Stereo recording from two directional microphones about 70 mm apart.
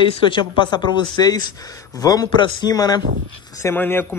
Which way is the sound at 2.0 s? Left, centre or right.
Left.